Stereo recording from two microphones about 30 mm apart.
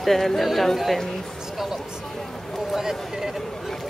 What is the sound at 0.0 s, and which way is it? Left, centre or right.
Speech, centre.